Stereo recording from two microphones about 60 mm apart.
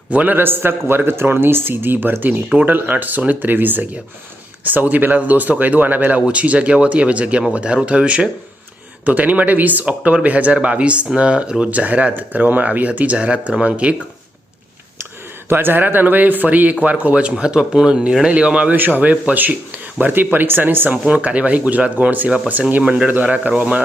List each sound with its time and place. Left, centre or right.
0.1 s speech: right
0.3 s speech: right; by 13.9 s centre
15.4 s speech: right